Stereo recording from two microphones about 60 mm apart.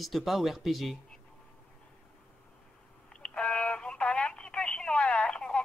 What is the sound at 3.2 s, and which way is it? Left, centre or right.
Telephone, centre.